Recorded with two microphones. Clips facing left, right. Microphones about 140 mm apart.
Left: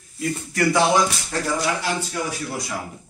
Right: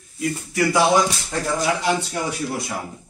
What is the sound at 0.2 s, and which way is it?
Speech, 5° right (ahead or behind).